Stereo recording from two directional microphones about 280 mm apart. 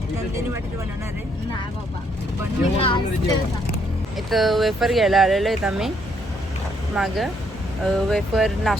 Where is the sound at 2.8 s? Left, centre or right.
Centre.